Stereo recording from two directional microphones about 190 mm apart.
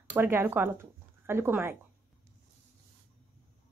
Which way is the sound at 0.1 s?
10° right (ahead or behind).